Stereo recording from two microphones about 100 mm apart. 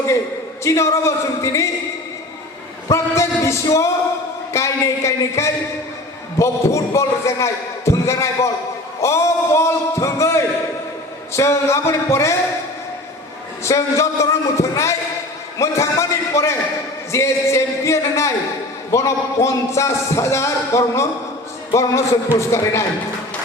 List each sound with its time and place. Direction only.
0.6 s a man's voice: 30° left (ahead or behind)
2.9 s a man's voice: 30° left (ahead or behind)
13.7 s a man's voice: 30° left (ahead or behind)
22.4 s a man's voice: 30° left (ahead or behind)